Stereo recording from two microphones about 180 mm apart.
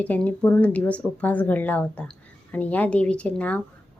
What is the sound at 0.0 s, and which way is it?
A woman's voice, 10° left (ahead or behind).